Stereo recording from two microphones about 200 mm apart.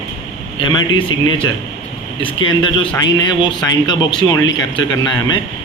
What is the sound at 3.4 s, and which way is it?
A man's voice, 20° left (ahead or behind).